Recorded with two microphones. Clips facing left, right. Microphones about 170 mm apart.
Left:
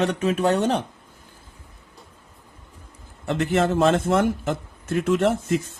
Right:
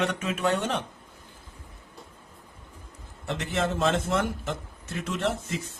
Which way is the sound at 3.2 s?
50° left (ahead or behind).